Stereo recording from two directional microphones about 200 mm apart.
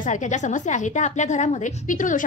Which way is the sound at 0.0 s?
40° left (ahead or behind).